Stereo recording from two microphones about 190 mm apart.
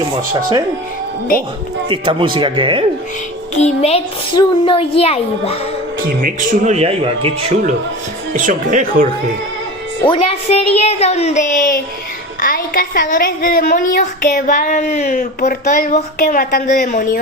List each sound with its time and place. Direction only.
1.9 s speech: 25° right (ahead or behind)
3.5 s a child's voice: 35° left (ahead or behind)
6.2 s speech: 40° right (ahead or behind)
8.3 s speech: 40° right (ahead or behind)
10.0 s a child's voice: 30° left (ahead or behind); by 17.2 s 45° left (ahead or behind)